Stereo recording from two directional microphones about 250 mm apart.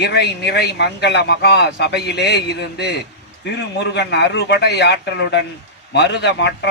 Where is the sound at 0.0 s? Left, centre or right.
Left.